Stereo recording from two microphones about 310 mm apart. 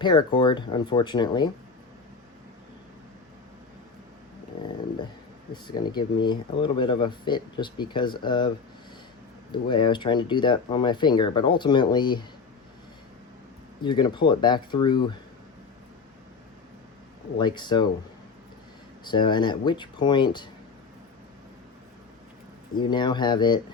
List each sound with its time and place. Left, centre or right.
0.0 s speech: centre
4.5 s dog: centre
5.6 s speech: centre
14.0 s speech: centre
17.3 s speech: centre
19.0 s speech: centre
22.7 s speech: centre